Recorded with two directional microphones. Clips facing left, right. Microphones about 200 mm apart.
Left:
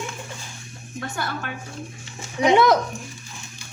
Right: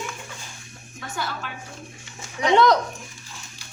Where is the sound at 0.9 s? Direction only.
55° left (ahead or behind).